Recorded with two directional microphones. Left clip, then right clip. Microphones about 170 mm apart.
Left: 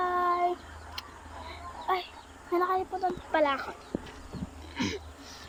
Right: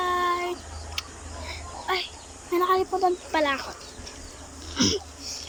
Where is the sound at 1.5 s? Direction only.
10° left (ahead or behind).